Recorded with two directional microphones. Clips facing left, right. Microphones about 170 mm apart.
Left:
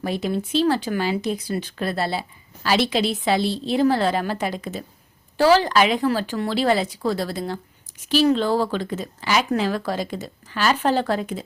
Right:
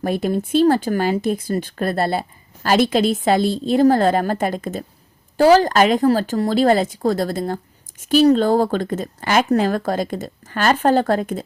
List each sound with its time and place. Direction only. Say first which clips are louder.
0.0 s speech: right 4 dB; 50° right (ahead or behind)